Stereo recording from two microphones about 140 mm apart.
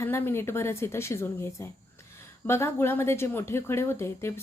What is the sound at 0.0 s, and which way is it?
Speech, 15° left (ahead or behind).